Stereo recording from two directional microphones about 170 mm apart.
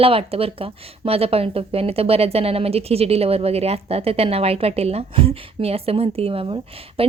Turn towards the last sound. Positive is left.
turn(degrees=-30)  # may be behind; listen again after turning